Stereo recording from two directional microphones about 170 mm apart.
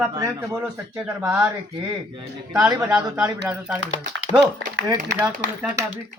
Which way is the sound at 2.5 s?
5° right (ahead or behind).